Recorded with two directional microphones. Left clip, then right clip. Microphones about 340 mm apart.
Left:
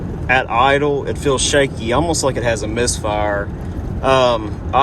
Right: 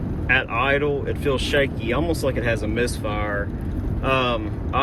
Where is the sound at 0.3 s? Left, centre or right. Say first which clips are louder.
Left 6 dB; centre.